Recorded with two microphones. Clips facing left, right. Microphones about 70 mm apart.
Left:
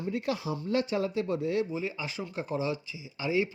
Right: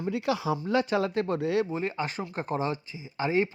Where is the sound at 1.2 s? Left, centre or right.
Right.